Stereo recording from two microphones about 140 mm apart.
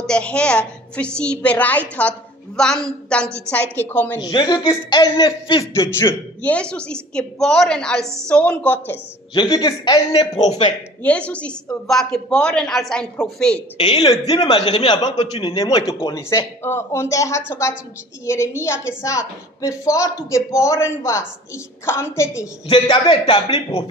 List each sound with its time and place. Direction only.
0.0 s a woman's voice: 5° left (ahead or behind)
4.2 s a woman's voice: 30° left (ahead or behind)
6.4 s a woman's voice: 10° left (ahead or behind)
8.0 s a woman's voice: 20° right (ahead or behind)
8.3 s a woman's voice: 10° left (ahead or behind)
9.3 s a man's voice: 35° left (ahead or behind)
11.0 s a woman's voice: 10° left (ahead or behind)
13.7 s a woman's voice: 30° left (ahead or behind)
15.0 s a man's voice: 50° left (ahead or behind)
15.4 s a man's voice: 35° left (ahead or behind)
16.3 s a woman's voice: 20° left (ahead or behind)
22.7 s a man's voice: 35° left (ahead or behind)